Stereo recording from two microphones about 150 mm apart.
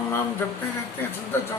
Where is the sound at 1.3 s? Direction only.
15° left (ahead or behind).